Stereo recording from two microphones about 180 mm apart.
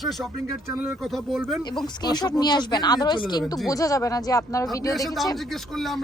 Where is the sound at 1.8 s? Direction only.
25° left (ahead or behind).